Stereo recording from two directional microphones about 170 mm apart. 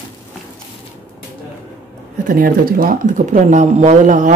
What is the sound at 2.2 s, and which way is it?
Speech, 60° right (ahead or behind).